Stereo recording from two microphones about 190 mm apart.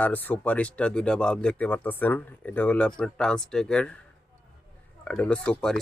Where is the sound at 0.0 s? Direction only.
10° left (ahead or behind).